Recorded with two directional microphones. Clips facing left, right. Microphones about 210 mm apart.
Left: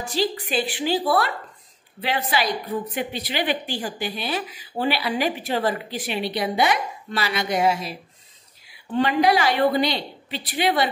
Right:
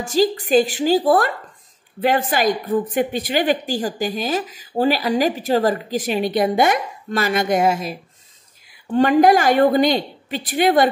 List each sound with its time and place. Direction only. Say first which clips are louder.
0.0 s speech: right 7 dB; 45° right (ahead or behind)
8.9 s speech: right 6 dB; 45° right (ahead or behind)